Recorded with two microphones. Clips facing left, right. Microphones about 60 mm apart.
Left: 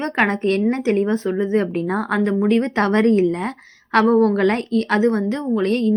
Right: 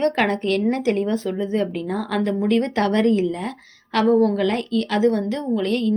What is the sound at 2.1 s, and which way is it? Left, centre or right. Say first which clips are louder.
A woman's voice: left 2 dB; left.